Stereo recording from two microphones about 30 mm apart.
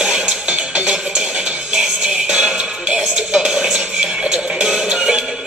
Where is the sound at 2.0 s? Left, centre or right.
Right.